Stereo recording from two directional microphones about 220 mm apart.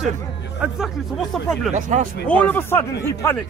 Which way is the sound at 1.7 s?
35° right (ahead or behind).